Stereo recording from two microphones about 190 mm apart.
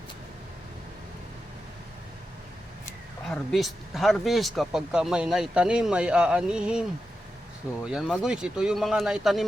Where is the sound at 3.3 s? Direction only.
Centre (ahead or behind).